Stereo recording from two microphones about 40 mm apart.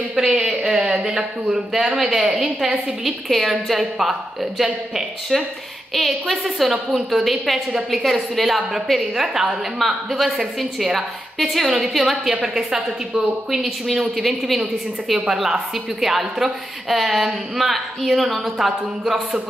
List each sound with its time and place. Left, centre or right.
0.1 s speech: centre
0.4 s a sound: centre
2.1 s a woman's voice: centre
3.3 s a woman's voice: centre
5.9 s a woman's voice: centre
13.6 s a woman's voice: centre